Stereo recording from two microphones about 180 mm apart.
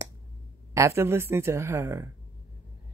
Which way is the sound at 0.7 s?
15° right (ahead or behind).